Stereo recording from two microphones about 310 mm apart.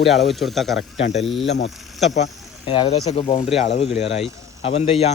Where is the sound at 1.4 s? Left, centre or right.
Left.